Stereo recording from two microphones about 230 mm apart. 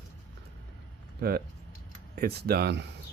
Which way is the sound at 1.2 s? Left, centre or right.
Right.